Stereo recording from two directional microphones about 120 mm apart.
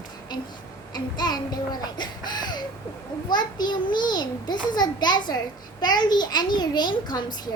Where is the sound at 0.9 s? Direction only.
35° left (ahead or behind).